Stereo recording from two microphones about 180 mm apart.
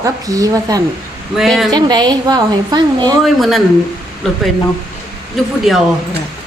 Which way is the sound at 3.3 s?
Centre (ahead or behind).